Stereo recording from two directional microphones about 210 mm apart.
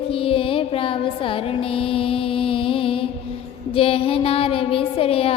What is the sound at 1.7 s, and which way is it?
Music, 25° left (ahead or behind).